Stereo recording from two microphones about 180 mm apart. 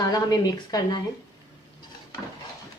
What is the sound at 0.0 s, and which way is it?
Speech, 20° left (ahead or behind).